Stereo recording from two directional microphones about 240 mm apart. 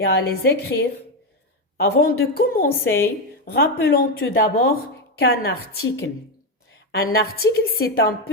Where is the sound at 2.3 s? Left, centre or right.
Left.